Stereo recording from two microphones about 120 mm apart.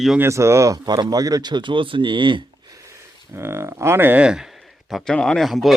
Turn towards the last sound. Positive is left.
turn(degrees=0)  # may be behind; listen again after turning